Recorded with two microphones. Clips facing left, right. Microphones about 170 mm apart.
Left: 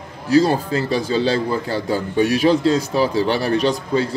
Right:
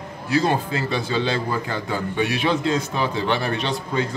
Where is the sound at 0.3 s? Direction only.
35° left (ahead or behind).